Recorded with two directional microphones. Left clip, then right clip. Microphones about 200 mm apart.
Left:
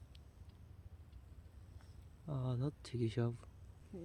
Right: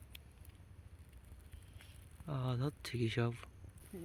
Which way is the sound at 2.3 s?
5° left (ahead or behind).